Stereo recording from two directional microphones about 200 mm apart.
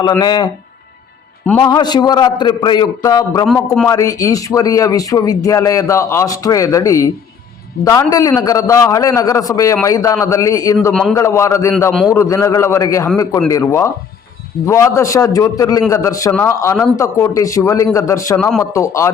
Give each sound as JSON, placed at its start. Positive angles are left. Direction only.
{"t": 0.2, "sound": "a man's voice", "side_deg": 20}
{"t": 18.3, "sound": "speech", "side_deg": 5}
{"t": 18.6, "sound": "speech", "side_deg": 15}